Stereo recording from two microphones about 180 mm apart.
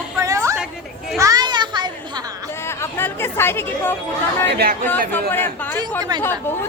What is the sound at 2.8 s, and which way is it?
Speech, 15° left (ahead or behind).